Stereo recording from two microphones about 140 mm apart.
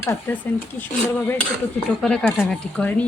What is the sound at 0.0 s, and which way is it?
Speech, 20° left (ahead or behind).